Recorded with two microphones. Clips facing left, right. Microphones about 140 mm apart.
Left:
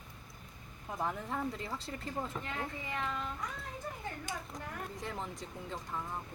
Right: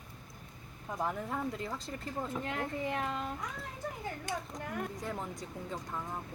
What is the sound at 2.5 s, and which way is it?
Speech, 55° right (ahead or behind).